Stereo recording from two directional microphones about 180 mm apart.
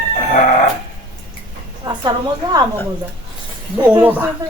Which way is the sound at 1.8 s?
20° right (ahead or behind).